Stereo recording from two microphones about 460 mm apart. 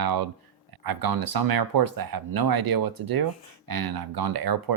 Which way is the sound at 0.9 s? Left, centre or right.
Right.